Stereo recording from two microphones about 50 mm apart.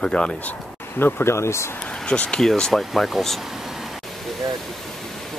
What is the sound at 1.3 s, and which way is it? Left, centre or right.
Speech, left.